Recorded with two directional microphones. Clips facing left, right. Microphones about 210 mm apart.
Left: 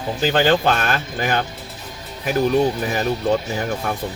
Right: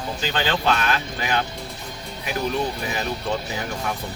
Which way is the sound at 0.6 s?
45° left (ahead or behind).